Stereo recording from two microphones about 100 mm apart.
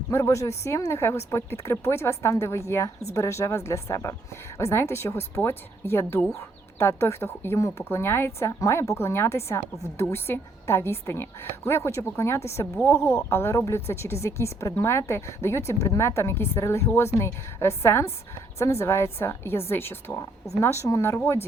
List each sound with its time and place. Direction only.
0.1 s a woman's voice: 30° left (ahead or behind)